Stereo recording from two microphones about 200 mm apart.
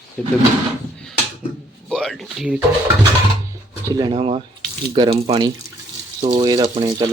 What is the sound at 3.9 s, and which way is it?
Speech, 20° right (ahead or behind).